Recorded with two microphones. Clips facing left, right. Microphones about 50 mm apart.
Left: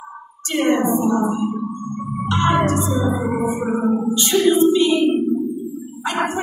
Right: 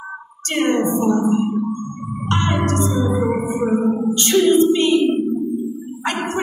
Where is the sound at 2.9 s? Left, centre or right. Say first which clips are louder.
Right 1 dB; centre.